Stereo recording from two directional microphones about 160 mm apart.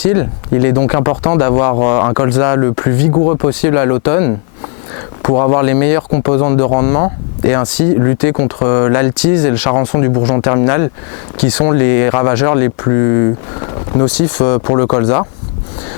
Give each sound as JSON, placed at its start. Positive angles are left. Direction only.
{"t": 0.1, "sound": "speech", "side_deg": 15}